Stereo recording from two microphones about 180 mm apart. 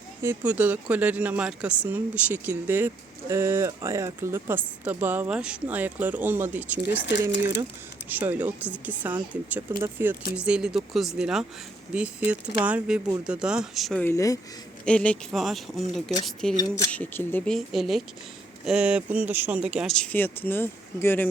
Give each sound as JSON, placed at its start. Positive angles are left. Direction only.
{"t": 0.2, "sound": "speech", "side_deg": -10}
{"t": 8.1, "sound": "speech", "side_deg": -10}
{"t": 14.0, "sound": "speech", "side_deg": 15}